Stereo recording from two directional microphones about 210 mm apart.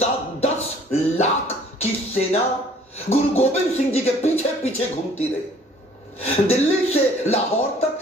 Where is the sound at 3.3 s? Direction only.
30° left (ahead or behind).